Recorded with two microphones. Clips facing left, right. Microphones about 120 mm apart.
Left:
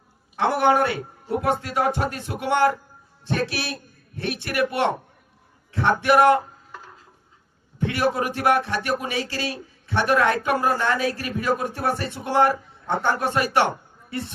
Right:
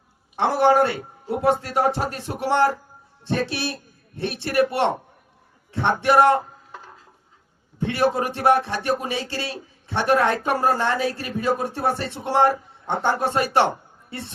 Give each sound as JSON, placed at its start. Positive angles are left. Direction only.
{"t": 0.4, "sound": "a man's voice", "side_deg": -30}
{"t": 7.8, "sound": "speech", "side_deg": -30}